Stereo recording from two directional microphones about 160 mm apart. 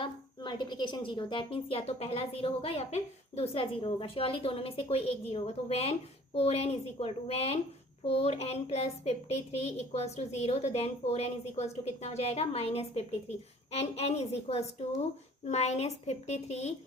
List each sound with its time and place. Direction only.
0.0 s a woman's voice: 30° left (ahead or behind)